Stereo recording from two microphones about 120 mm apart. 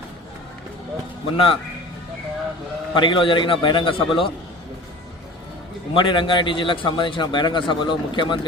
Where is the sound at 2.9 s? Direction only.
40° left (ahead or behind).